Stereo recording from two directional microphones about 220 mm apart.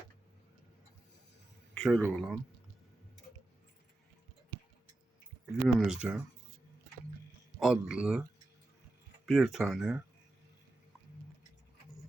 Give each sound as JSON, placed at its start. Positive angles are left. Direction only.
{"t": 1.7, "sound": "speech", "side_deg": 0}
{"t": 4.5, "sound": "tick-tock", "side_deg": -20}
{"t": 5.5, "sound": "speech", "side_deg": 0}
{"t": 7.6, "sound": "speech", "side_deg": -5}
{"t": 9.2, "sound": "speech", "side_deg": 0}